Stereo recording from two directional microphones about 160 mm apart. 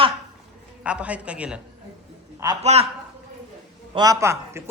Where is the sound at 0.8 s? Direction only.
10° right (ahead or behind).